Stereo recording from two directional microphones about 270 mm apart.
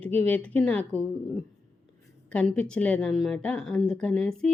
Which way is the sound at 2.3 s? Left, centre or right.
Centre.